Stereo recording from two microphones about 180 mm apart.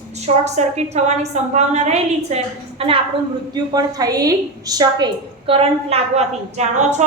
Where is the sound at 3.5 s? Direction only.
20° right (ahead or behind).